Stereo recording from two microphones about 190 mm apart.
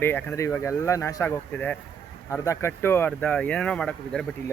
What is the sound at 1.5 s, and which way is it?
Speech, 5° left (ahead or behind).